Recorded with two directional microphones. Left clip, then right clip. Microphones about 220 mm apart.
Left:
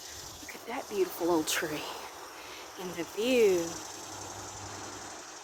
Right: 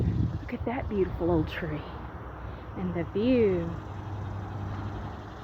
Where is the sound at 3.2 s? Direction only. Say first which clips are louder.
Even; 30° left (ahead or behind).